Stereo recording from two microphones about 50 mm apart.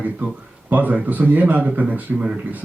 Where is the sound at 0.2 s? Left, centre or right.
Right.